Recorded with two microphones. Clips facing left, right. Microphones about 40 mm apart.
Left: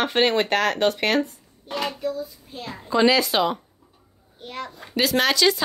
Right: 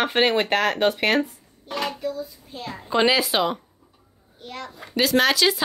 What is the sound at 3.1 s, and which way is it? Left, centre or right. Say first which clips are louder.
Speech: left 1 dB; centre.